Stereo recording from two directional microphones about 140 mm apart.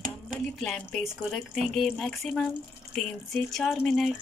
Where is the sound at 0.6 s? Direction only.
5° left (ahead or behind).